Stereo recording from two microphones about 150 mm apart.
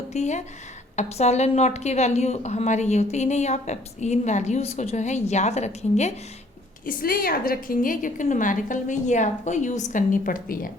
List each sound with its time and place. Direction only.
0.1 s a woman's voice: 50° left (ahead or behind)
6.8 s a woman's voice: 75° left (ahead or behind)